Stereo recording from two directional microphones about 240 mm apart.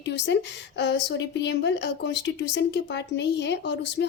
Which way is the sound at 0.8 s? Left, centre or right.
Left.